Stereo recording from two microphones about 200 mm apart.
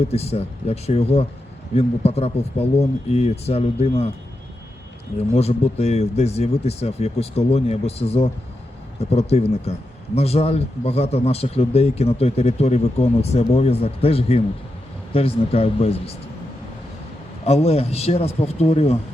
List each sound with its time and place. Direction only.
0.0 s speech: 30° left (ahead or behind)
5.3 s speech: 30° left (ahead or behind)
17.4 s speech: 30° left (ahead or behind)